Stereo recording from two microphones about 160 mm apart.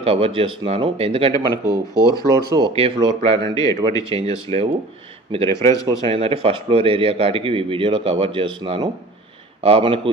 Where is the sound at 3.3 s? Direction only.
20° left (ahead or behind).